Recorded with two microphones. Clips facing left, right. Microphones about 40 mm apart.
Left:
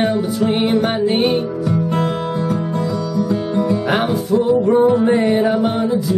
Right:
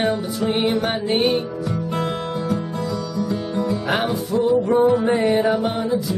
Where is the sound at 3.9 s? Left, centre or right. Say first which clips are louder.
Left 4 dB; centre.